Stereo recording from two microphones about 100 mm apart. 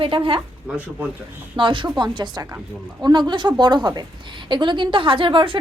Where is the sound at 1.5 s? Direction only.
55° right (ahead or behind).